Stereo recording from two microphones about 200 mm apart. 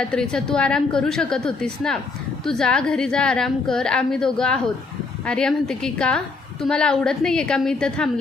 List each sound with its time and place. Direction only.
0.1 s a woman's voice: 5° left (ahead or behind)